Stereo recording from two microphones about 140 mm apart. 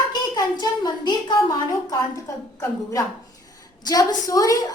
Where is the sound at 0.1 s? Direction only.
30° left (ahead or behind).